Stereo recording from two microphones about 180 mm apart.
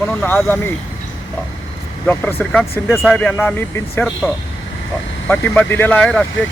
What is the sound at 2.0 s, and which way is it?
Speech, 5° left (ahead or behind).